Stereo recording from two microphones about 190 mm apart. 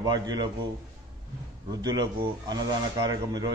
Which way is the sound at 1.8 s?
20° right (ahead or behind).